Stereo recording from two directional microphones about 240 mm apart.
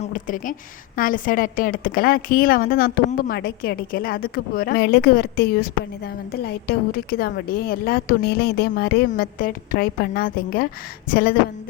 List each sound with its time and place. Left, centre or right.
0.0 s a woman's voice: left